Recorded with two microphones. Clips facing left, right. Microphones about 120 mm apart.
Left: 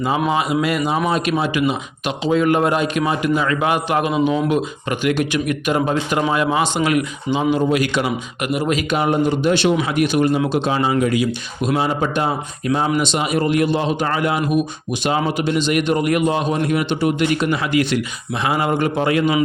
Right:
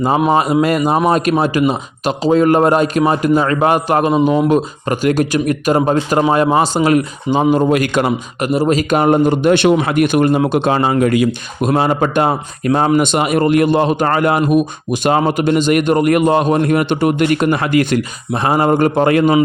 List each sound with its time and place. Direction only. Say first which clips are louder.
0.3 s a man's voice: right 6 dB; 40° right (ahead or behind)
8.5 s a man's voice: right 6 dB; 35° right (ahead or behind)